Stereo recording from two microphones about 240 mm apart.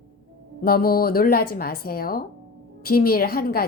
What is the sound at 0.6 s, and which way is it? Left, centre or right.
A woman's voice, left.